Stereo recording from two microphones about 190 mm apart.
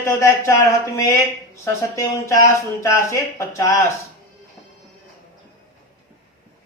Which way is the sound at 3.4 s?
15° left (ahead or behind).